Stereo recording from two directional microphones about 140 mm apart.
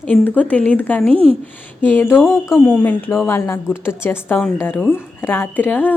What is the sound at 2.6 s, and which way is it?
A woman's voice, 10° left (ahead or behind).